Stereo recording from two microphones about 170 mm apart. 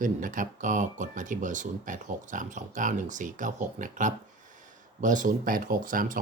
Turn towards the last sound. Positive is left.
turn(degrees=-55)  # may be behind; listen again after turning